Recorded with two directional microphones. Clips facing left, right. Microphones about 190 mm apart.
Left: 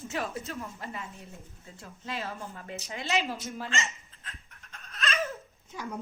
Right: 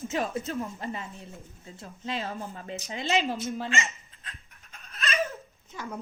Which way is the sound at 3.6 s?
15° right (ahead or behind).